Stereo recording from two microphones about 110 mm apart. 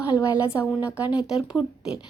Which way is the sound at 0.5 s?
40° left (ahead or behind).